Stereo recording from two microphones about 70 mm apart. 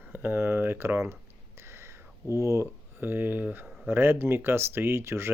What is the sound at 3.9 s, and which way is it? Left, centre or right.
Speech, right.